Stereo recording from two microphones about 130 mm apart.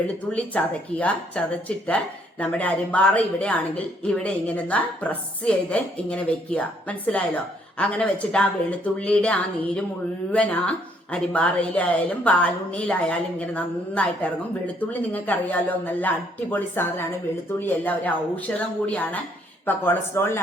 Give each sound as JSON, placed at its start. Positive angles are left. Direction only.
{"t": 0.3, "sound": "a woman's voice", "side_deg": 10}
{"t": 10.3, "sound": "a woman's voice", "side_deg": 10}